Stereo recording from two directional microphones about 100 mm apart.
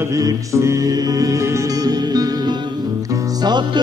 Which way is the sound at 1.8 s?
40° right (ahead or behind).